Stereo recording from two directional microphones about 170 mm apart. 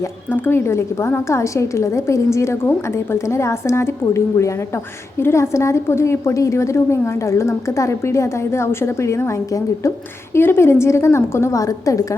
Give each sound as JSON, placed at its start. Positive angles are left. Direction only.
{"t": 0.3, "sound": "a woman's voice", "side_deg": 15}